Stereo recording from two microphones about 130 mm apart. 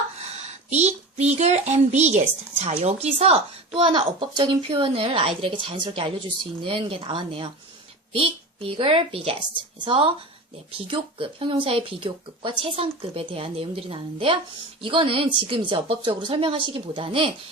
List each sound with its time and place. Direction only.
0.2 s a child's voice: 55° right (ahead or behind)
3.8 s a woman's voice: 35° right (ahead or behind)